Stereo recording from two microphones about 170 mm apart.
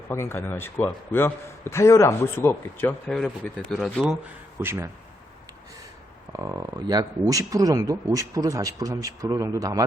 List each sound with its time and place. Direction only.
0.1 s a man's voice: 15° left (ahead or behind); by 4.2 s centre (ahead or behind)
4.6 s speech: 15° right (ahead or behind)
6.3 s speech: 20° right (ahead or behind)